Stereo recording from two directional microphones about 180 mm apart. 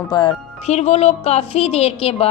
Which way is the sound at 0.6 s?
35° left (ahead or behind).